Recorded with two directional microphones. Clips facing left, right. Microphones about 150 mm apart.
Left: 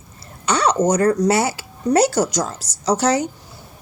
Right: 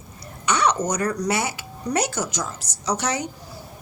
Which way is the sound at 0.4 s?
30° left (ahead or behind).